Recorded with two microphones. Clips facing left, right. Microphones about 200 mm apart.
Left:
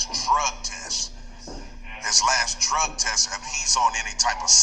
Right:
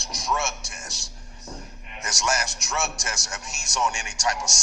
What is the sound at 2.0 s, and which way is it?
A man's voice, 65° right (ahead or behind).